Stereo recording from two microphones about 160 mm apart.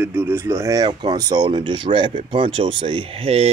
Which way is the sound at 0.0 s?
15° right (ahead or behind).